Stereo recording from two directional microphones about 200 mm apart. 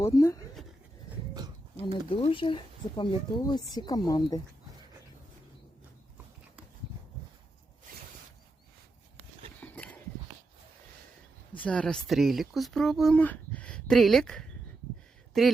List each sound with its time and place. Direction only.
0.0 s speech: 15° left (ahead or behind)
1.9 s speech: 30° left (ahead or behind)
9.6 s horse: 10° left (ahead or behind)
11.5 s speech: 5° left (ahead or behind)